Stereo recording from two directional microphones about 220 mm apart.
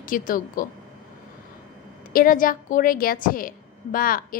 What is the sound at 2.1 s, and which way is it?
A woman's voice, 40° left (ahead or behind).